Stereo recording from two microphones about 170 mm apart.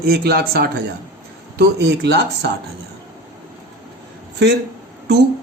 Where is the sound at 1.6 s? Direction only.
85° right.